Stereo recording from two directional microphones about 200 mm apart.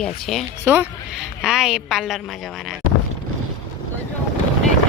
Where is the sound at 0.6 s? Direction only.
10° right (ahead or behind).